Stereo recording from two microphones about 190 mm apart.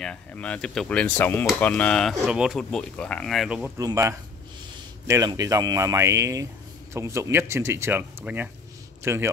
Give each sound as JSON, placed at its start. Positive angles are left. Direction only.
{"t": 0.0, "sound": "speech", "side_deg": 5}